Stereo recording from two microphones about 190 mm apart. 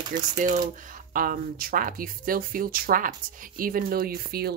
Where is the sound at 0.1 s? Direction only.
45° right (ahead or behind).